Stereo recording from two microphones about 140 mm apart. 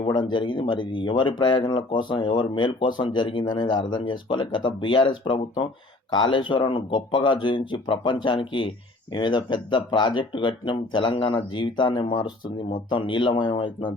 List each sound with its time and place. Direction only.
0.0 s speech: 35° left (ahead or behind)